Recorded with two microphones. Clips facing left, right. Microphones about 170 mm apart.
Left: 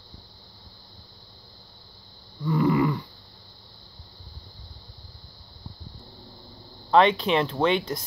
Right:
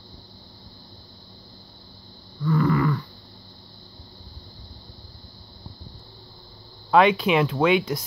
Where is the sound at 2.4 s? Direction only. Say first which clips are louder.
Even; 20° left (ahead or behind).